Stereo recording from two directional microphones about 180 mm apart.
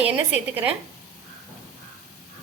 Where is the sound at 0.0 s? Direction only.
10° right (ahead or behind).